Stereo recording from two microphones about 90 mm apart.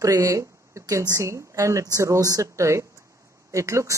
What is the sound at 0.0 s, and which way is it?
Speech, 35° right (ahead or behind).